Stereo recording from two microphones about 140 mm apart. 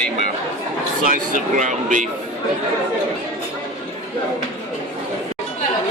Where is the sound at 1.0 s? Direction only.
75° right (ahead or behind).